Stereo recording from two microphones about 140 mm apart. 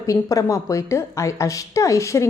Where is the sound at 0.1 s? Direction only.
25° left (ahead or behind).